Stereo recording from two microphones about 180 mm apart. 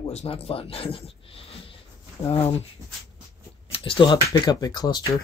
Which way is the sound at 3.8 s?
30° left (ahead or behind).